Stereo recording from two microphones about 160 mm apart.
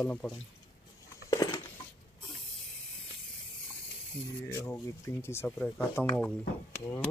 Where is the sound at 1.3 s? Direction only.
20° left (ahead or behind).